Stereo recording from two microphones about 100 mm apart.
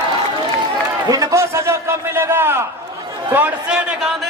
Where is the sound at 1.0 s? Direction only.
35° right (ahead or behind).